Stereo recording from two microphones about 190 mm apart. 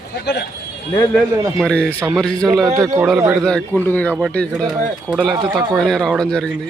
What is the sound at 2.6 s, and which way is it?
Speech, 15° right (ahead or behind).